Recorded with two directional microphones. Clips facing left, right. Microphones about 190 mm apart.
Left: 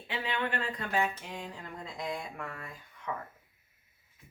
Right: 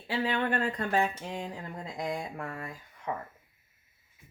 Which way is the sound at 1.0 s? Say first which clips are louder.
Right 3 dB; 30° right (ahead or behind).